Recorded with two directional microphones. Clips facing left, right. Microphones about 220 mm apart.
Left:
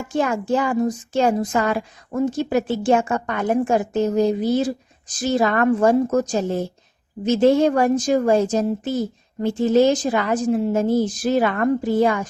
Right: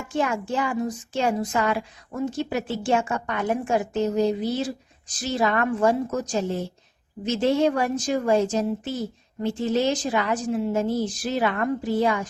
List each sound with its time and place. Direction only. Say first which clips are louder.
0.1 s a woman's voice: left 5 dB; 40° left (ahead or behind)